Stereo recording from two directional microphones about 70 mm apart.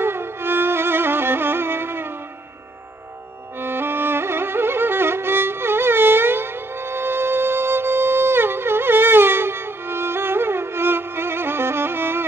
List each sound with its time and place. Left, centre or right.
0.0 s music: right
3.5 s music: right